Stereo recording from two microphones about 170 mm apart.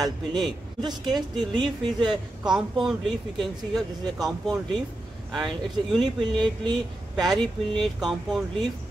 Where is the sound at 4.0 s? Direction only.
20° right (ahead or behind).